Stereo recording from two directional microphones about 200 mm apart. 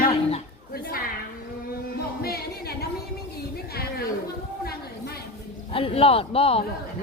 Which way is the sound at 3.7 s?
50° left (ahead or behind).